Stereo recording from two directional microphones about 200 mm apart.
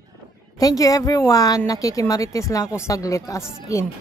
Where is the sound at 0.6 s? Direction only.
15° left (ahead or behind).